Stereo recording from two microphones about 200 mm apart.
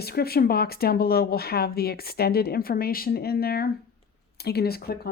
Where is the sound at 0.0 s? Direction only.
50° left (ahead or behind).